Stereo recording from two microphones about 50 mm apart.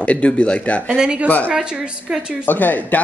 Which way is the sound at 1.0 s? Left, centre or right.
Centre.